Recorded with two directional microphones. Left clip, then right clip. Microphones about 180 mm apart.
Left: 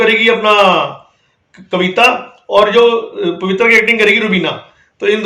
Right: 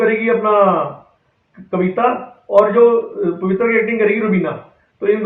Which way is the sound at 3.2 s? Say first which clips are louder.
Left 4 dB; 55° left (ahead or behind).